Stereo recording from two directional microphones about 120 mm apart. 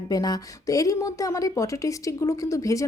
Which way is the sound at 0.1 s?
30° left (ahead or behind).